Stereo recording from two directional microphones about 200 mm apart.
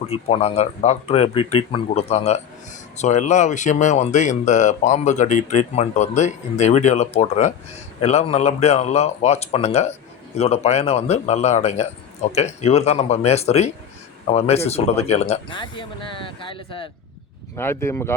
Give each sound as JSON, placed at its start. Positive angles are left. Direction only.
{"t": 0.1, "sound": "speech", "side_deg": 30}
{"t": 17.6, "sound": "speech", "side_deg": 10}